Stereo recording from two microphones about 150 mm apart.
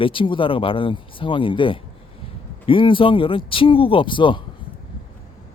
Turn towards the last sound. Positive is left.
turn(degrees=35)  # may be behind; listen again after turning